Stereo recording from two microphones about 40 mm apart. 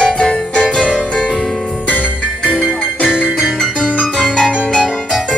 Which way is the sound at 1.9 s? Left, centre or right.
Left.